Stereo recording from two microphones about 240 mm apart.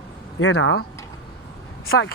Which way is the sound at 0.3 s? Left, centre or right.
Left.